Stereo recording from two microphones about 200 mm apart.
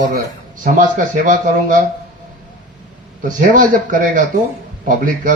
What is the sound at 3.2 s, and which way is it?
Speech, 40° right (ahead or behind).